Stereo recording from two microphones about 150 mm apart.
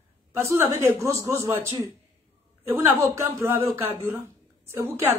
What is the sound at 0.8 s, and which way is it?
A man's voice, 20° right (ahead or behind).